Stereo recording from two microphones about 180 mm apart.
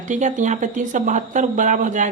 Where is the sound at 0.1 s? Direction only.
45° right (ahead or behind).